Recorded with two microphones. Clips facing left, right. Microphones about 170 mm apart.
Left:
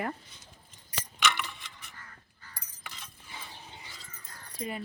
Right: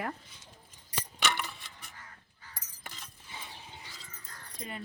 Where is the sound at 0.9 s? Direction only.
35° right (ahead or behind).